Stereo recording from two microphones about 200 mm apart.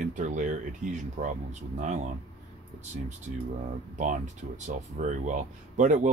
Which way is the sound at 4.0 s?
40° right (ahead or behind).